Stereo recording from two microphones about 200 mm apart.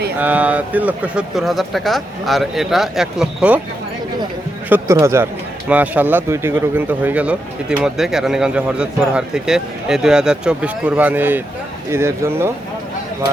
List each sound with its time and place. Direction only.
0.2 s speech: 10° right (ahead or behind)
4.7 s a man's voice: 15° right (ahead or behind)